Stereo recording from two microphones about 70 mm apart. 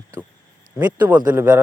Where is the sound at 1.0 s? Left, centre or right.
Right.